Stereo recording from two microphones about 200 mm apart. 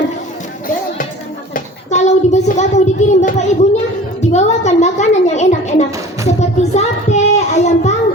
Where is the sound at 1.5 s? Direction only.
35° left (ahead or behind).